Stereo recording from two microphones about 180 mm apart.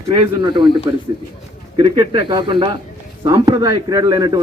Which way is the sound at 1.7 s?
30° right (ahead or behind).